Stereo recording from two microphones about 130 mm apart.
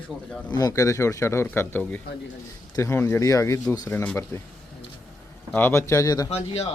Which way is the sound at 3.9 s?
15° left (ahead or behind).